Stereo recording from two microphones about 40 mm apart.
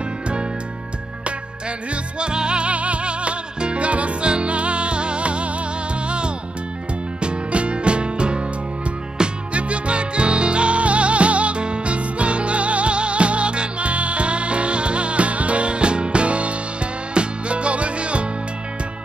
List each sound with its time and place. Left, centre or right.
1.9 s music: right